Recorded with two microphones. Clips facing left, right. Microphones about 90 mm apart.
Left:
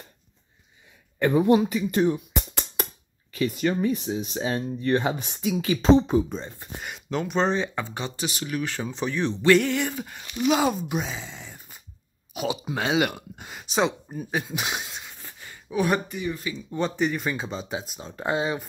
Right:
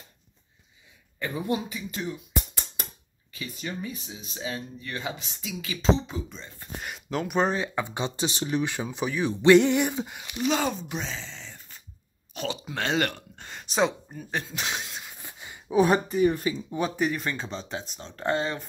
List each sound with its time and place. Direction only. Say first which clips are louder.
1.2 s speech: left 10 dB; 65° left (ahead or behind)
2.5 s speech: left 8 dB; 70° left (ahead or behind); by 6.5 s 40° left (ahead or behind)
6.8 s speech: left 2 dB; centre (ahead or behind)
7.8 s speech: right 2 dB; 20° right (ahead or behind)
9.4 s speech: right 3 dB; 20° right (ahead or behind)
10.4 s speech: left 4 dB; 10° left (ahead or behind)
14.1 s speech: left 4 dB; 10° left (ahead or behind)
15.1 s a sound: even; 15° right (ahead or behind)
15.7 s speech: right 3 dB; 30° right (ahead or behind)
16.7 s speech: left 4 dB; 5° right (ahead or behind); by 18.7 s 10° left (ahead or behind)